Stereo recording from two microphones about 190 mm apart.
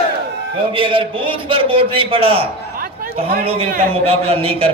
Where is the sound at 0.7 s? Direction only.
25° right (ahead or behind).